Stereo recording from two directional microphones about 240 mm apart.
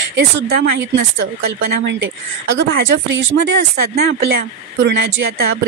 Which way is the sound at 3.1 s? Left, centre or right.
Right.